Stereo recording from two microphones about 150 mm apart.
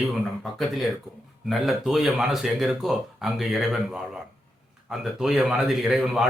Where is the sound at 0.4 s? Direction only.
Centre (ahead or behind).